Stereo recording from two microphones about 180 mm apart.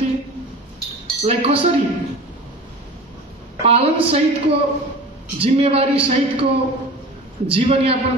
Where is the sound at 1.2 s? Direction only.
30° right (ahead or behind).